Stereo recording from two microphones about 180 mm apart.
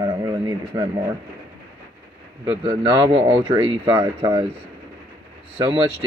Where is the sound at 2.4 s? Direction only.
25° right (ahead or behind).